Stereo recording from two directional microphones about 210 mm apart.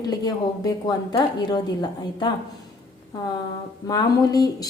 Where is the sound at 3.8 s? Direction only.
20° left (ahead or behind).